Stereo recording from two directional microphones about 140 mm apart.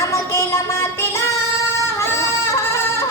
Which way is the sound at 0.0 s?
20° left (ahead or behind).